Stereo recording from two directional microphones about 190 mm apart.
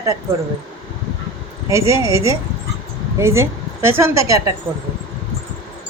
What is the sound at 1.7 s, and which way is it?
A woman's voice, 15° right (ahead or behind).